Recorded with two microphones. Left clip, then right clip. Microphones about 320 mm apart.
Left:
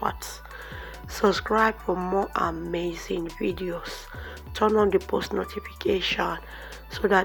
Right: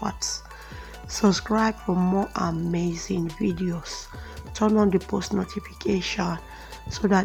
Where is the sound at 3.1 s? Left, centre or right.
Right.